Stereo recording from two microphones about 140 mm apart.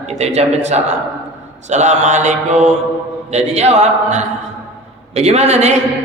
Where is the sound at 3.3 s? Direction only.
50° right (ahead or behind).